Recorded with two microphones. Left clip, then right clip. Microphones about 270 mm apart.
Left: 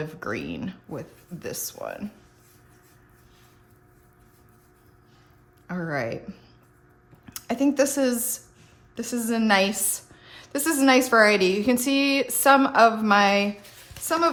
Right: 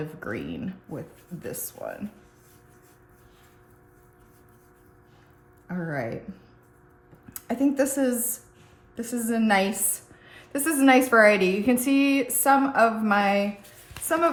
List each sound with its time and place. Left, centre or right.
0.2 s a woman's voice: centre
5.6 s a woman's voice: centre
7.3 s a woman's voice: centre